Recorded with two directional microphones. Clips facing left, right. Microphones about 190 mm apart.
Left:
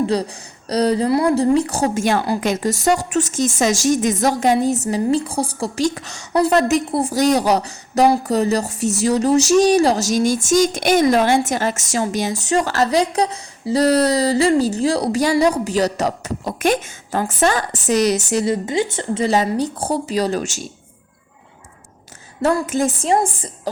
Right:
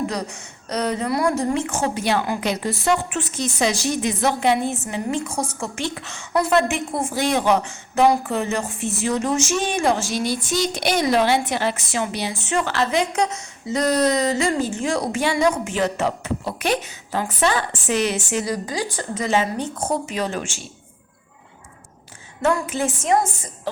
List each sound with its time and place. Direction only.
0.0 s a woman's voice: 30° left (ahead or behind)
18.4 s a woman's voice: 25° left (ahead or behind); by 20.7 s 40° left (ahead or behind)
22.4 s a woman's voice: 35° left (ahead or behind)